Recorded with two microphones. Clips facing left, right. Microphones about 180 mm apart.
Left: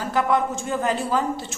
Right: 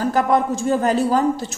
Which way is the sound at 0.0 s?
40° right (ahead or behind).